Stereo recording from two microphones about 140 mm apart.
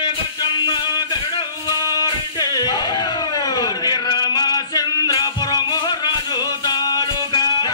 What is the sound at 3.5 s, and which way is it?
Male singing, 30° left (ahead or behind).